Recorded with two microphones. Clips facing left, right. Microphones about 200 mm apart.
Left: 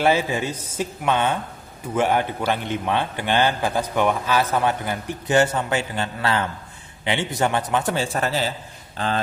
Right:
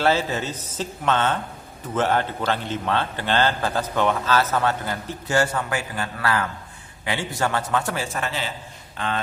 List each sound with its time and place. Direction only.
0.0 s a man's voice: 15° left (ahead or behind)
8.0 s a man's voice: 35° left (ahead or behind)